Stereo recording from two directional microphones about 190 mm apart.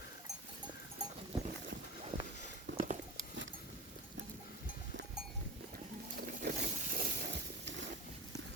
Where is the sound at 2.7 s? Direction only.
75° right (ahead or behind).